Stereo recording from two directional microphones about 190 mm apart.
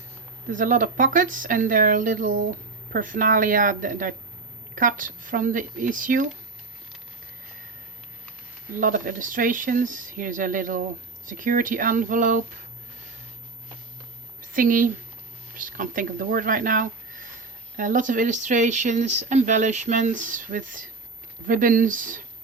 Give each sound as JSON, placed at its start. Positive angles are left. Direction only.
{"t": 0.5, "sound": "speech", "side_deg": -45}
{"t": 8.8, "sound": "speech", "side_deg": -45}
{"t": 14.4, "sound": "a woman's voice", "side_deg": -45}